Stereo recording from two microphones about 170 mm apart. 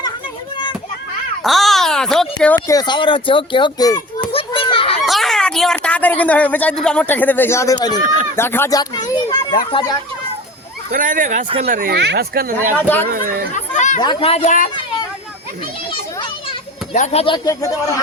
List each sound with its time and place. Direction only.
1.5 s a sound: centre (ahead or behind)
2.6 s speech: 25° left (ahead or behind)
4.3 s children playing: 30° left (ahead or behind)
5.0 s speech: centre (ahead or behind); by 8.0 s 25° left (ahead or behind)
8.0 s speech: 50° right (ahead or behind)
8.4 s a sound: 15° left (ahead or behind)
10.9 s speech: 50° right (ahead or behind)
11.6 s speech: 60° right (ahead or behind)
11.9 s speech: 75° right (ahead or behind); by 13.5 s 60° right (ahead or behind)
13.5 s chatter: 45° left (ahead or behind)
14.0 s a man's voice: 30° left (ahead or behind); by 14.7 s 50° left (ahead or behind)
16.9 s speech: 40° left (ahead or behind); by 17.7 s 20° left (ahead or behind)